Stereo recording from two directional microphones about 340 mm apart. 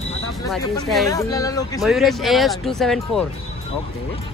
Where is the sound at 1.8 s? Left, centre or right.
Centre.